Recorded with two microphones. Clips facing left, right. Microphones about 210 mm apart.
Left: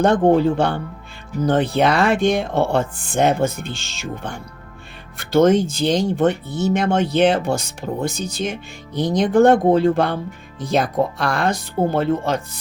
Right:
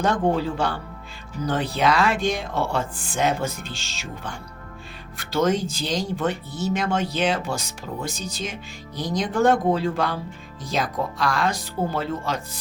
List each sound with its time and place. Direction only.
0.0 s speech: 55° left (ahead or behind)
5.3 s speech: 60° left (ahead or behind)